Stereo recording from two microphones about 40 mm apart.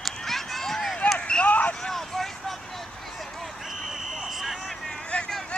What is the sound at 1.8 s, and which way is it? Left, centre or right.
Vehicle, centre.